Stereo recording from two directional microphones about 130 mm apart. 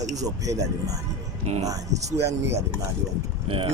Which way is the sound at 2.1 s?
20° right (ahead or behind).